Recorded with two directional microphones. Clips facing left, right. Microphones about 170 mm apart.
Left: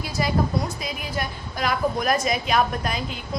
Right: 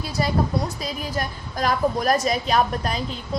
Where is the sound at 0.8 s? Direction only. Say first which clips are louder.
Right 2 dB; 40° right (ahead or behind).